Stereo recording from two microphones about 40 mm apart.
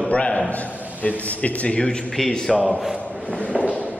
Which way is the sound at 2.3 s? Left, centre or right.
Centre.